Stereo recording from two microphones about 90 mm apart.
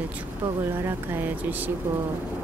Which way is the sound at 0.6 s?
30° right (ahead or behind).